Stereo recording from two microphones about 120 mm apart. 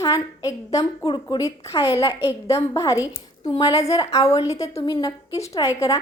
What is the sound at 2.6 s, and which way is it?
A woman's voice, 25° left (ahead or behind).